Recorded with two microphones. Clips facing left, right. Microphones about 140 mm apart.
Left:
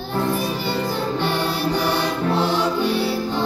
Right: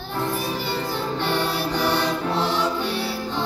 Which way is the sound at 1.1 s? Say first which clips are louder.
Left 2 dB; 5° left (ahead or behind).